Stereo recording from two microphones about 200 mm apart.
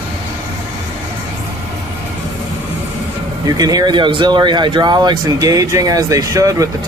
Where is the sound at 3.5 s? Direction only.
20° right (ahead or behind).